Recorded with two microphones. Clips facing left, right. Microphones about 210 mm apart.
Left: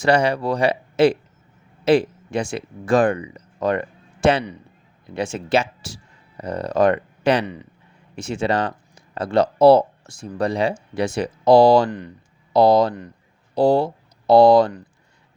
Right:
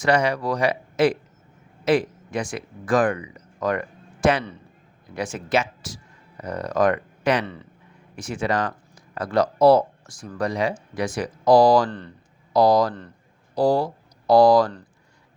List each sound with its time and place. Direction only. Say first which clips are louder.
0.0 s speech: left 3 dB; 30° left (ahead or behind)
7.4 s speech: left 3 dB; 15° left (ahead or behind)
8.1 s speech: left 3 dB; 25° left (ahead or behind)
11.9 s speech: left 4 dB; 15° left (ahead or behind)
12.5 s speech: left 3 dB; 25° left (ahead or behind)